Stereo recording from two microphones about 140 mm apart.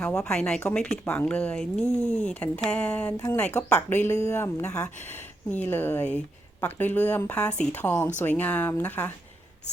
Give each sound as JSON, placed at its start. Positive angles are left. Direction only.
{"t": 0.0, "sound": "speech", "side_deg": 10}
{"t": 3.1, "sound": "speech", "side_deg": 25}
{"t": 3.3, "sound": "speech", "side_deg": 15}